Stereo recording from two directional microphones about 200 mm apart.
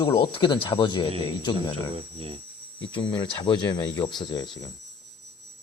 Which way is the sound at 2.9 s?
25° left (ahead or behind).